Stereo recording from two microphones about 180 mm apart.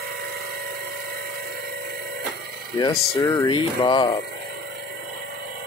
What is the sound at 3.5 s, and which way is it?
Speech, 25° left (ahead or behind).